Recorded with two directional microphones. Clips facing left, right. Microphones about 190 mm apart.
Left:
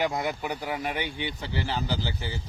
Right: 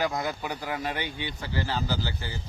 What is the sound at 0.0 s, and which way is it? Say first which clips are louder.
A man's voice: left 1 dB; 20° left (ahead or behind).